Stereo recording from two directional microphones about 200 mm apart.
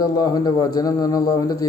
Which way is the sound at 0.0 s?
20° left (ahead or behind).